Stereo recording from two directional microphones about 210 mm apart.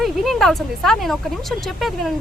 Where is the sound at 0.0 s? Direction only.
Centre (ahead or behind).